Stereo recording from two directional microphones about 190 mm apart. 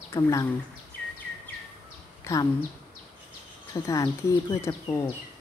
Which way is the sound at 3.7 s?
15° left (ahead or behind).